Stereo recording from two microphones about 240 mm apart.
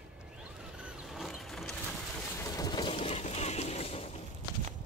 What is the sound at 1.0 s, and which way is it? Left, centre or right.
Vehicle, centre.